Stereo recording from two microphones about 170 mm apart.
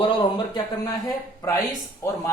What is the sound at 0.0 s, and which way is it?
Speech, 30° left (ahead or behind).